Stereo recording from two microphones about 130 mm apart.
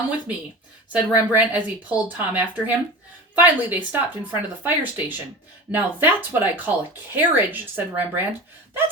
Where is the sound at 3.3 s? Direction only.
15° right (ahead or behind).